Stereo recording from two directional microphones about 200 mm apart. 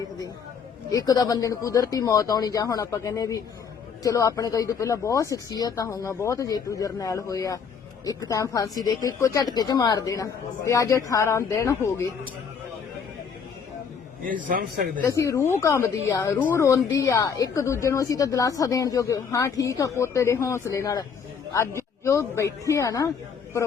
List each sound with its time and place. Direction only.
0.9 s speech: 20° left (ahead or behind)
14.4 s a man's voice: 45° right (ahead or behind)
15.0 s a man's voice: 15° left (ahead or behind)